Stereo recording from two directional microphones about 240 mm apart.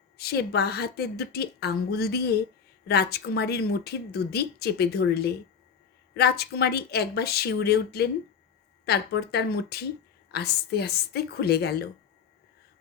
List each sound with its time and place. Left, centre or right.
0.2 s speech: left